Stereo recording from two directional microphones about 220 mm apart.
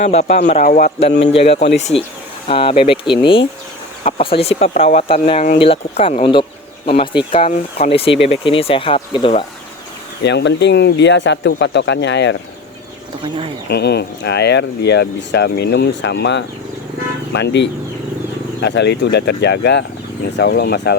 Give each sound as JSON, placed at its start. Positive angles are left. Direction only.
{"t": 0.0, "sound": "a man's voice", "side_deg": 30}
{"t": 1.0, "sound": "speech", "side_deg": 55}
{"t": 1.3, "sound": "speech", "side_deg": 25}
{"t": 10.2, "sound": "speech", "side_deg": 50}
{"t": 13.7, "sound": "speech", "side_deg": 50}